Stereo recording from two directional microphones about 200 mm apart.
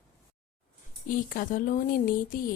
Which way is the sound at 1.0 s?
40° left (ahead or behind).